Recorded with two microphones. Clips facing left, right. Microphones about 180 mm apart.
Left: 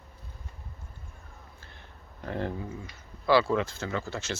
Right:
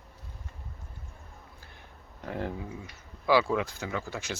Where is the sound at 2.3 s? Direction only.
10° right (ahead or behind).